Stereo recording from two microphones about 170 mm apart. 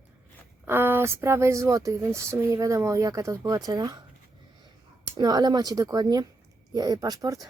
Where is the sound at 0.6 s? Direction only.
10° right (ahead or behind).